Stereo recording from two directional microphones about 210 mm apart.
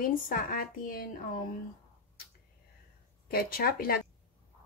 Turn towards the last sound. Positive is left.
turn(degrees=45)  # may be behind; listen again after turning